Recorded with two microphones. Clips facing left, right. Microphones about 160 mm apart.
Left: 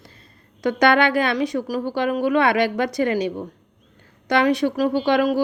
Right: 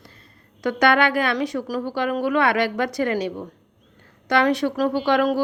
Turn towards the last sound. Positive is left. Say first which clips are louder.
# left 1 dB
turn(degrees=15)  # may be behind; listen again after turning